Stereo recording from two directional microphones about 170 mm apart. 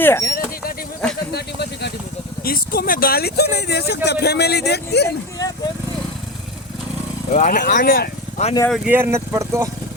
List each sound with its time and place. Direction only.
0.0 s speech: 15° left (ahead or behind)
0.3 s vehicle: 60° left (ahead or behind)
1.3 s speech: 75° left (ahead or behind)
2.4 s speech: 60° left (ahead or behind)
5.4 s speech: 20° left (ahead or behind)
7.3 s speech: 45° left (ahead or behind)
7.7 s speech: 55° left (ahead or behind)
8.7 s speech: 5° right (ahead or behind)
9.0 s speech: 15° right (ahead or behind)